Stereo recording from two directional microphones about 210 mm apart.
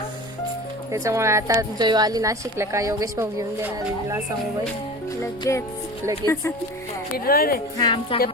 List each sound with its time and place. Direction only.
0.9 s speech: 15° right (ahead or behind)
5.2 s music: 15° left (ahead or behind)
6.2 s speech: 20° right (ahead or behind)
7.3 s a woman's voice: 45° left (ahead or behind)
7.8 s a woman's voice: 20° left (ahead or behind)